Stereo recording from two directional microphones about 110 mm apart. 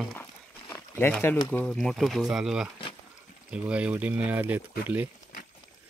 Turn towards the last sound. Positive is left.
turn(degrees=-15)  # may be behind; listen again after turning